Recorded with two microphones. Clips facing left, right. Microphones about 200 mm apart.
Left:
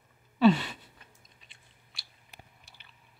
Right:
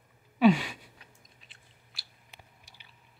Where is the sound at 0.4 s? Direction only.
10° right (ahead or behind).